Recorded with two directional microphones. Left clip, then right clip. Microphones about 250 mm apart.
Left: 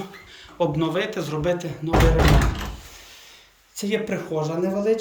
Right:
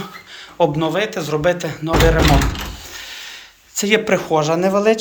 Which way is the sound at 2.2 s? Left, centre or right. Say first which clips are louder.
Right 5 dB; left.